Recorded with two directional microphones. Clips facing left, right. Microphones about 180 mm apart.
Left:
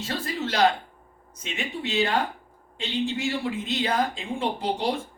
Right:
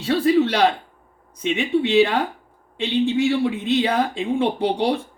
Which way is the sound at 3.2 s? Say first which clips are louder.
Right 8 dB; 60° right (ahead or behind).